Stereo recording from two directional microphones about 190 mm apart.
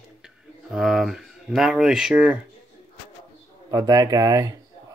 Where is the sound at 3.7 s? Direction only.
20° right (ahead or behind).